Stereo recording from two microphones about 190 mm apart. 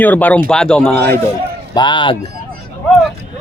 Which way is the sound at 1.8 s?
25° left (ahead or behind).